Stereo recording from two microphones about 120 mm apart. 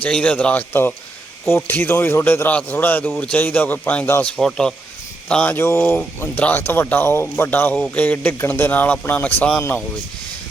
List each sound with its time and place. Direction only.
0.0 s speech: 10° left (ahead or behind)